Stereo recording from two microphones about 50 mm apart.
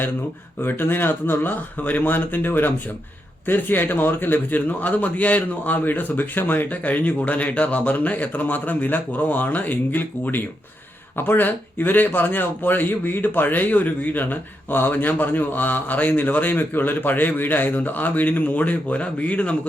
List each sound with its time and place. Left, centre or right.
0.6 s a man's voice: left